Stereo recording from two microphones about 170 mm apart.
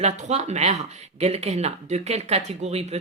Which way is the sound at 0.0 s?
45° right (ahead or behind).